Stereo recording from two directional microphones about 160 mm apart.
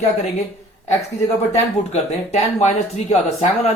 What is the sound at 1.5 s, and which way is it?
Speech, 45° left (ahead or behind).